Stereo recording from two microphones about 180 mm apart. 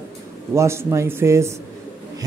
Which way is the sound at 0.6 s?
15° right (ahead or behind).